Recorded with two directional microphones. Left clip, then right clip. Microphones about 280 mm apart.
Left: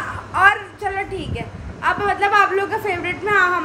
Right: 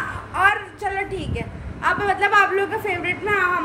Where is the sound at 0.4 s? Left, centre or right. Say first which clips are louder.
Left 4 dB; centre.